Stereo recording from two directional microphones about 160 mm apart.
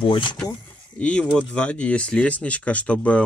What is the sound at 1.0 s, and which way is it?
Speech, 5° left (ahead or behind).